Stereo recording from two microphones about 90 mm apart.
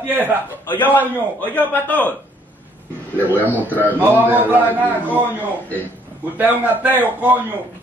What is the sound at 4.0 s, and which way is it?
Speech, 20° right (ahead or behind).